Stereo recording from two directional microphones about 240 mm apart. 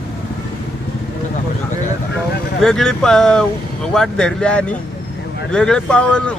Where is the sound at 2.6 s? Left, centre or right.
Centre.